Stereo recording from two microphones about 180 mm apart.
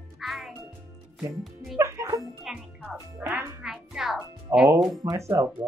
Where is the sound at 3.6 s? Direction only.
5° right (ahead or behind).